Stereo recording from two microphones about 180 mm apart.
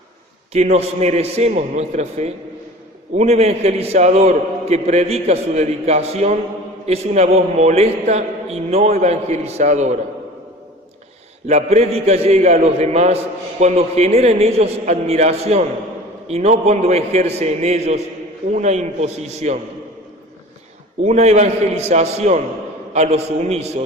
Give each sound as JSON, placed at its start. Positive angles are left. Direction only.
{"t": 0.5, "sound": "a man's voice", "side_deg": -35}
{"t": 11.4, "sound": "a man's voice", "side_deg": -40}
{"t": 21.0, "sound": "a man's voice", "side_deg": -35}